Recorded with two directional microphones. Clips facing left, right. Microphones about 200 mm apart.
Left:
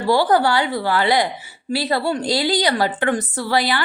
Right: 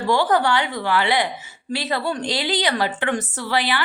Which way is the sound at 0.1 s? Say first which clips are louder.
Left 3 dB; 35° left (ahead or behind).